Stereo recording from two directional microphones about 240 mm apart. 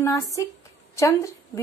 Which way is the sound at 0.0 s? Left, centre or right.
Centre.